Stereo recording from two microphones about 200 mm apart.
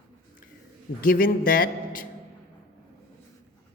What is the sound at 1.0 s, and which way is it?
Speech, 45° left (ahead or behind).